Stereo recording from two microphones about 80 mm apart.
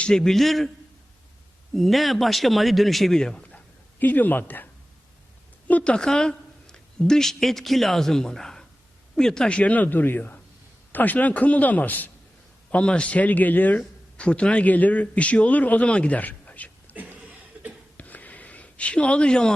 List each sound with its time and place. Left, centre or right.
0.0 s speech: centre
1.7 s speech: centre
4.0 s a woman's voice: left
16.9 s chuckle: right
17.2 s cough: centre
17.9 s a sound: centre